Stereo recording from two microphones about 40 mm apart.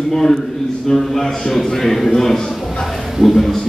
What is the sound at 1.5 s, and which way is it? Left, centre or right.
Speech, centre.